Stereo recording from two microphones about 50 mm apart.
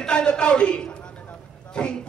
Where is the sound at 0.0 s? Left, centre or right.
Centre.